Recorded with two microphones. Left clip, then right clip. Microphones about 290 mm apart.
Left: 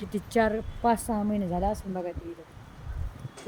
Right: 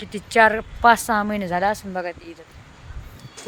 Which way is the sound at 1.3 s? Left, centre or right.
Right.